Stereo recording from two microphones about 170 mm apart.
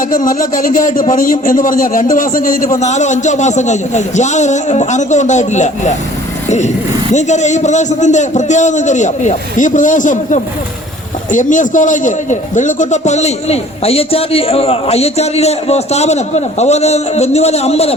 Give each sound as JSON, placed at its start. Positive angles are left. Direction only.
{"t": 0.1, "sound": "a man's voice", "side_deg": 55}
{"t": 7.1, "sound": "a man's voice", "side_deg": 45}